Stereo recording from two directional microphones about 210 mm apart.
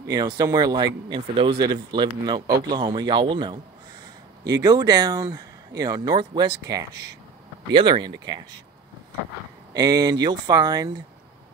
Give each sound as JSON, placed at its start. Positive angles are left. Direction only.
{"t": 0.0, "sound": "speech", "side_deg": -20}
{"t": 9.8, "sound": "speech", "side_deg": -20}